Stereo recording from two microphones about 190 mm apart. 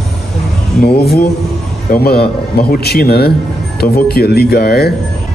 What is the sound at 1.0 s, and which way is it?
A man's voice, 55° left (ahead or behind).